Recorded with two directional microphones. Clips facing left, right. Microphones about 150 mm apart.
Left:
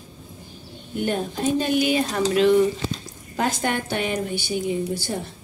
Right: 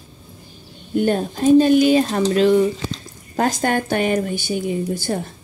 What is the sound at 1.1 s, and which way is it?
A woman's voice, 35° right (ahead or behind).